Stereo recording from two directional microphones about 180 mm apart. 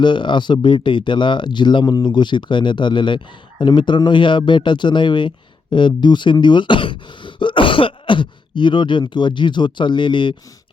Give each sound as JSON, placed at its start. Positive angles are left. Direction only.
{"t": 0.0, "sound": "speech", "side_deg": 25}